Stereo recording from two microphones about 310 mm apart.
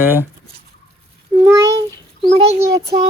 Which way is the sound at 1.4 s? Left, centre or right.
Centre.